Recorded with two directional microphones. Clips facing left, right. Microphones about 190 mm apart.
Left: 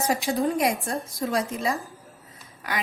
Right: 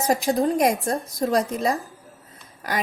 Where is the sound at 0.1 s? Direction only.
45° right (ahead or behind).